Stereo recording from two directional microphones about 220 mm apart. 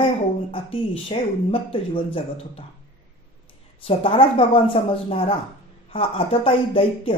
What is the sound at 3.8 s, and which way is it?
Speech, 25° left (ahead or behind).